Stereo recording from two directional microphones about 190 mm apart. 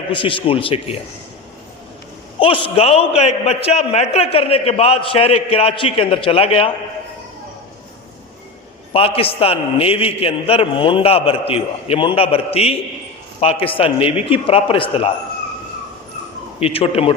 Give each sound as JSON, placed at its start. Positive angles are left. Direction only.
{"t": 0.1, "sound": "a man's voice", "side_deg": 30}
{"t": 2.7, "sound": "a man's voice", "side_deg": 30}
{"t": 8.9, "sound": "a man's voice", "side_deg": 30}
{"t": 16.6, "sound": "a man's voice", "side_deg": 30}